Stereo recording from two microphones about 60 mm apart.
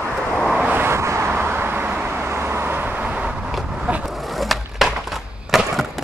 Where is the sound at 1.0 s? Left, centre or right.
Right.